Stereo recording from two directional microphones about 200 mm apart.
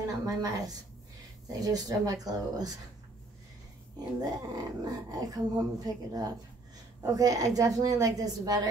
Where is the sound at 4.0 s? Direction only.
20° right (ahead or behind).